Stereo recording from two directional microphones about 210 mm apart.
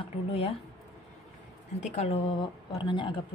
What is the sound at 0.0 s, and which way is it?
Speech, 25° left (ahead or behind).